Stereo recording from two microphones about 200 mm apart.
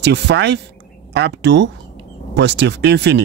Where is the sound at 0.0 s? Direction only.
60° right (ahead or behind).